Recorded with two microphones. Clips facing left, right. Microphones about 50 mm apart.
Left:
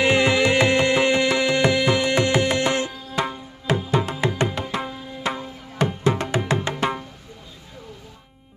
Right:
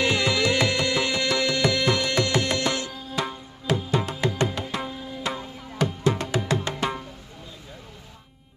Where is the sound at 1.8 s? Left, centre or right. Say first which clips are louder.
Left 4 dB; centre.